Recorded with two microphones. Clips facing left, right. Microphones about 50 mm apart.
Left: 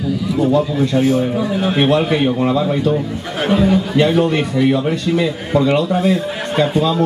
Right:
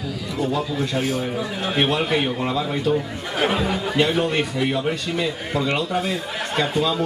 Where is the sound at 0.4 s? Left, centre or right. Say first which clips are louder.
Left 8 dB; centre.